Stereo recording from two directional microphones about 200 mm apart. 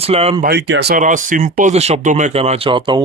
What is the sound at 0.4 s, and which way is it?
Speech, 55° right (ahead or behind).